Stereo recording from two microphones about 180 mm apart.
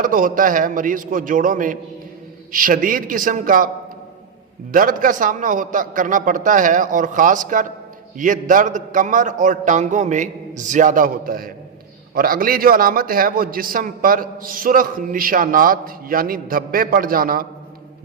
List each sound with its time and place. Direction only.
0.0 s a man's voice: 50° right (ahead or behind)
4.7 s a man's voice: 50° right (ahead or behind)